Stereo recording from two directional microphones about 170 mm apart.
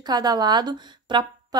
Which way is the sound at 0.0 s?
25° right (ahead or behind).